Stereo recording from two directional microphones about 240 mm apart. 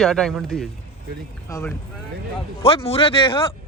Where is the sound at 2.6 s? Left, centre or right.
Left.